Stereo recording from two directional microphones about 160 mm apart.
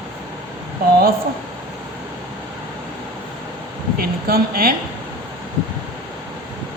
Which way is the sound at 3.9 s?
65° right (ahead or behind).